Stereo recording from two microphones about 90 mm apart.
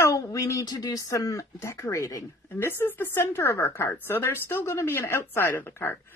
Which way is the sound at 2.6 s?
25° left (ahead or behind).